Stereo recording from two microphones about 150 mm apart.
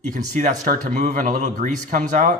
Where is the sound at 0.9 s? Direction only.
55° right (ahead or behind).